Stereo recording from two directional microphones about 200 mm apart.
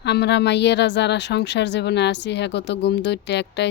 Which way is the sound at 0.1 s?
60° left (ahead or behind).